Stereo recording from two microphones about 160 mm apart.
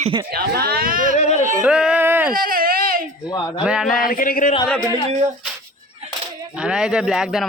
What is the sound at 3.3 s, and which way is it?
Speech, 20° left (ahead or behind).